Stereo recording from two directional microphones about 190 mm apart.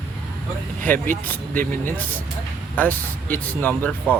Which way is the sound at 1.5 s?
45° right (ahead or behind).